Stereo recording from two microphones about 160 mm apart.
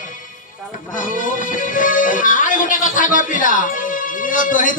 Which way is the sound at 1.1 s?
55° left (ahead or behind).